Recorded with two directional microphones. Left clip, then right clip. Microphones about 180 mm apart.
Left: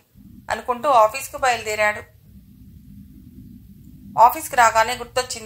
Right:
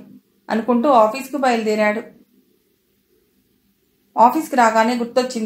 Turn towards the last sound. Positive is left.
turn(degrees=35)  # may be behind; listen again after turning